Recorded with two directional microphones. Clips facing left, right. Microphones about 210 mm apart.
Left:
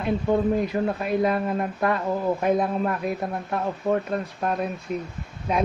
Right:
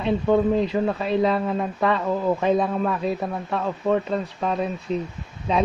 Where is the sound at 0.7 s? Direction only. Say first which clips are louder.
Right 2 dB; 10° left (ahead or behind).